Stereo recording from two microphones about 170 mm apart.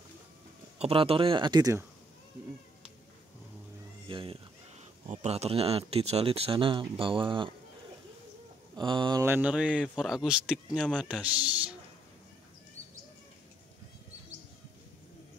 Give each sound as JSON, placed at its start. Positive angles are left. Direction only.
{"t": 0.7, "sound": "speech", "side_deg": -35}
{"t": 4.1, "sound": "a sound", "side_deg": -30}
{"t": 5.0, "sound": "speech", "side_deg": -40}
{"t": 8.7, "sound": "speech", "side_deg": -25}
{"t": 9.2, "sound": "speech", "side_deg": -10}